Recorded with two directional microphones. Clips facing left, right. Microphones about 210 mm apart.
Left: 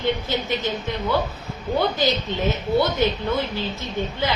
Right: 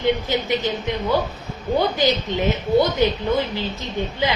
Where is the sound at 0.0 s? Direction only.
15° right (ahead or behind).